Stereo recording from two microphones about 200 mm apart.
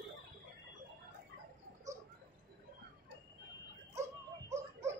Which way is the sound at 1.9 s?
15° right (ahead or behind).